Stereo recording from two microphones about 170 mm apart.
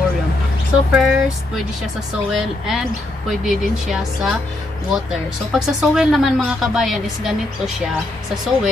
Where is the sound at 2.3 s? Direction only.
Centre (ahead or behind).